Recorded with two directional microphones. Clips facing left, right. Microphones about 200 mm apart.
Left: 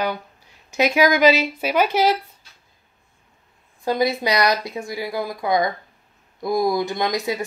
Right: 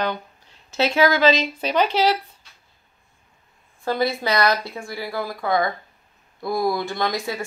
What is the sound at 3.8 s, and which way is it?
Speech, 15° left (ahead or behind).